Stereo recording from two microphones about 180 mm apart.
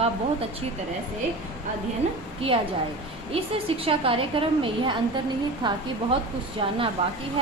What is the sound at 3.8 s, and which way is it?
A woman's voice, 30° right (ahead or behind).